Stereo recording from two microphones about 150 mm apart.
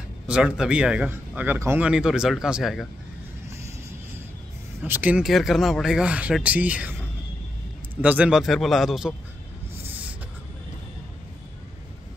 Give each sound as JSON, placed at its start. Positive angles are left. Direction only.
{"t": 0.3, "sound": "a man's voice", "side_deg": -5}
{"t": 4.8, "sound": "speech", "side_deg": -10}
{"t": 8.0, "sound": "a man's voice", "side_deg": -10}
{"t": 9.8, "sound": "a sound", "side_deg": -10}